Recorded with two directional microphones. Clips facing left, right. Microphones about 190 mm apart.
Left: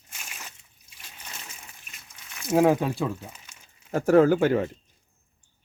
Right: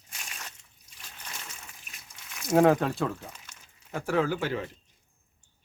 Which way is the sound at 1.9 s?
Centre (ahead or behind).